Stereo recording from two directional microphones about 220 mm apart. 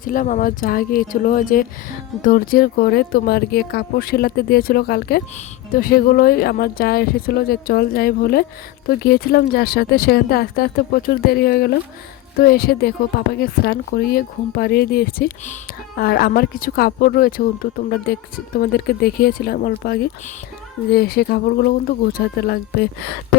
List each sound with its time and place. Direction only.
0.0 s a woman's voice: 40° left (ahead or behind)